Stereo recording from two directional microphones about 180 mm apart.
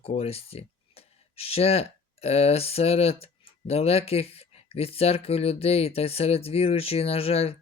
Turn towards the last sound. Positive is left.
turn(degrees=35)  # may be behind; listen again after turning